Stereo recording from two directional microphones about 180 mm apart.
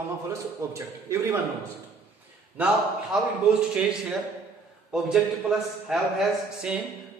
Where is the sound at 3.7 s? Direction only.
5° right (ahead or behind).